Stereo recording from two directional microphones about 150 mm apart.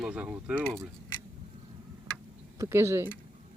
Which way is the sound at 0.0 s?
10° right (ahead or behind).